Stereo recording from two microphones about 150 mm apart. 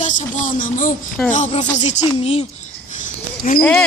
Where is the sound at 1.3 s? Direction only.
55° left (ahead or behind).